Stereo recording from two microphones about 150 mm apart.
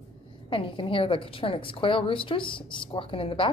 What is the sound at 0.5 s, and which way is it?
A woman's voice, 35° left (ahead or behind).